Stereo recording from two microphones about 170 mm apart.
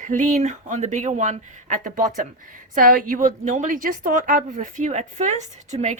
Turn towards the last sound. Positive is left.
turn(degrees=-45)  # may be behind; listen again after turning